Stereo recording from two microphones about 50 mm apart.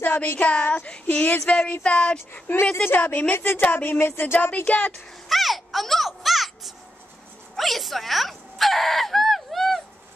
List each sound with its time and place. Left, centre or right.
0.0 s a sound: left
0.6 s speech: left
0.8 s speech: centre
1.5 s speech: left
2.7 s speech: left
3.3 s speech: left
5.3 s a sound: centre
7.5 s speech: centre